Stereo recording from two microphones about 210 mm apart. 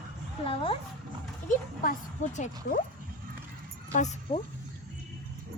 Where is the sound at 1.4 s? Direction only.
40° left (ahead or behind).